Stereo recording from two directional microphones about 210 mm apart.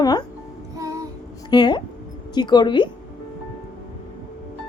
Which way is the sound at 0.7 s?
15° right (ahead or behind).